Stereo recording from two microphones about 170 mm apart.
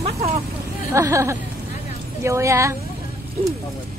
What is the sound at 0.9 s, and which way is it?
Speech, 15° right (ahead or behind).